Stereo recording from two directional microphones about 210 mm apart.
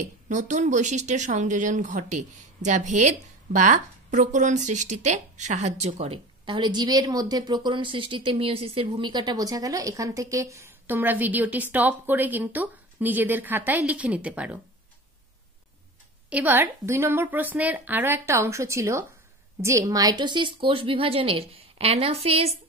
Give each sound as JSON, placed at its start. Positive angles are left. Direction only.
{"t": 0.0, "sound": "speech", "side_deg": -35}
{"t": 16.3, "sound": "a woman's voice", "side_deg": -10}